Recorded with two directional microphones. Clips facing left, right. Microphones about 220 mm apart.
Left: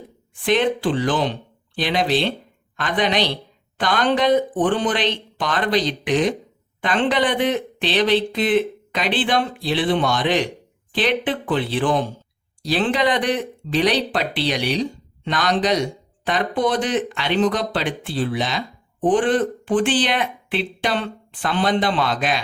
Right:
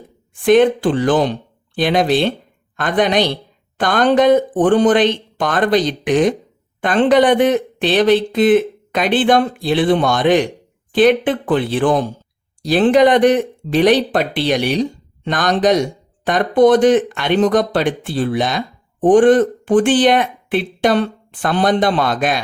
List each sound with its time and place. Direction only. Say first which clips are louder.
0.4 s speech: right 7 dB; 50° right (ahead or behind)